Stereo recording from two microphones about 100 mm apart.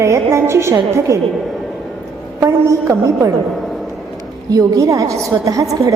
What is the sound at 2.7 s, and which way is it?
Speech, 30° right (ahead or behind).